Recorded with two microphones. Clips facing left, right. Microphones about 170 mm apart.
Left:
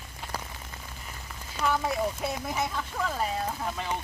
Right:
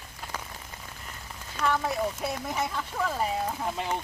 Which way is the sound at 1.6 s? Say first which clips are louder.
Even; 30° left (ahead or behind).